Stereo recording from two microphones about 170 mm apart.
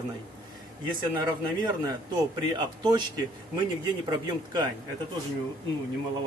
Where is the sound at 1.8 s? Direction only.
25° right (ahead or behind).